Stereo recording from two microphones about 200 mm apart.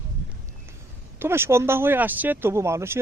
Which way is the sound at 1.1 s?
10° right (ahead or behind).